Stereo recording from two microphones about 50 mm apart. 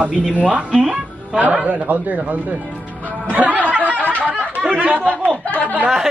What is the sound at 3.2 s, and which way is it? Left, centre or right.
Music, right.